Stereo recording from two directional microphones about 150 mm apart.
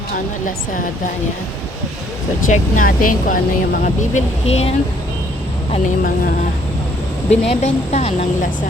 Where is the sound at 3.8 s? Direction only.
55° left (ahead or behind).